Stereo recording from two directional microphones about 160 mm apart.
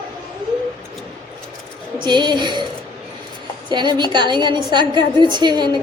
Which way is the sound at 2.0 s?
30° right (ahead or behind).